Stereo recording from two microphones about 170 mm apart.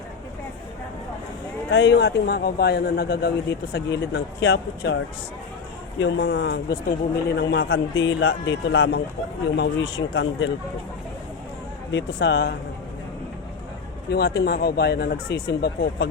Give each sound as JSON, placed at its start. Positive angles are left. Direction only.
{"t": 1.7, "sound": "a man's voice", "side_deg": 90}
{"t": 6.0, "sound": "speech", "side_deg": 90}
{"t": 7.3, "sound": "speech", "side_deg": 85}
{"t": 9.6, "sound": "speech", "side_deg": 90}
{"t": 11.9, "sound": "speech", "side_deg": 90}
{"t": 14.1, "sound": "a man's voice", "side_deg": 75}